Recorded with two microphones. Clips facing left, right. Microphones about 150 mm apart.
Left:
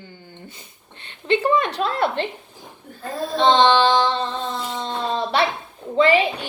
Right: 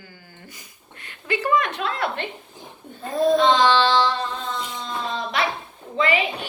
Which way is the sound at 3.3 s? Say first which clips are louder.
Left 4 dB; 30° left (ahead or behind).